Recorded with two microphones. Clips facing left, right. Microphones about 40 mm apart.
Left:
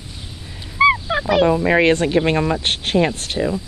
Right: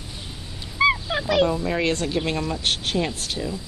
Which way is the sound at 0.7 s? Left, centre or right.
Centre.